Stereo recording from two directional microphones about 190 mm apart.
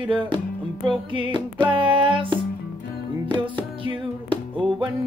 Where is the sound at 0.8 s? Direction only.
25° right (ahead or behind).